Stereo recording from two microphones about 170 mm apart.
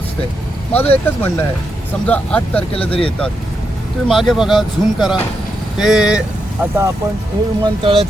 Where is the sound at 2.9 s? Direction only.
30° left (ahead or behind).